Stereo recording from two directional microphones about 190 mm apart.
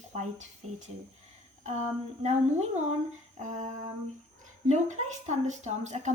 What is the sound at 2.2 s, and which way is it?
Speech, 35° right (ahead or behind).